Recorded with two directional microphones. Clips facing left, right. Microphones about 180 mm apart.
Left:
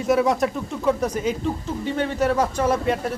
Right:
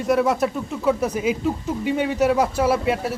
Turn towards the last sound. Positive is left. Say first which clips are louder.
# right 1 dB
turn(degrees=-5)  # may be behind; listen again after turning